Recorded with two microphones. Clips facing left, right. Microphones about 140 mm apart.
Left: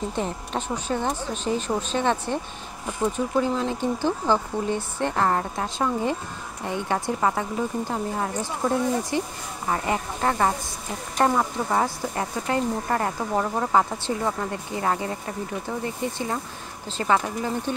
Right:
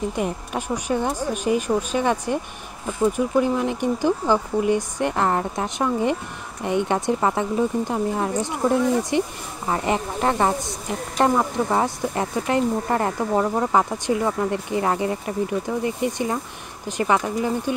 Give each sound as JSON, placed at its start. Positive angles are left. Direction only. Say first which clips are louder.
{"t": 0.1, "sound": "speech", "louder": "right 2 dB", "side_deg": -10}